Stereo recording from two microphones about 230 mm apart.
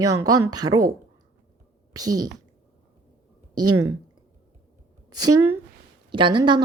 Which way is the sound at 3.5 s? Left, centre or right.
Right.